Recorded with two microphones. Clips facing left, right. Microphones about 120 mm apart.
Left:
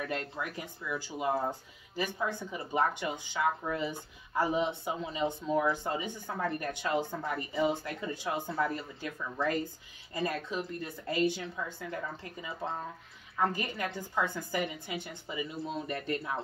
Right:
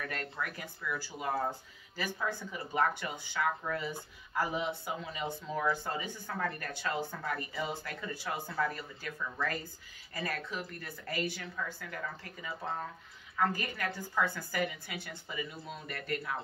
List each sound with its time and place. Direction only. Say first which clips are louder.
0.0 s speech: left 3 dB; 20° left (ahead or behind)